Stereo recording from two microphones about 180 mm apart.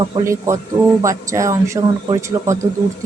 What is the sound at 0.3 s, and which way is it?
Speech, 15° right (ahead or behind).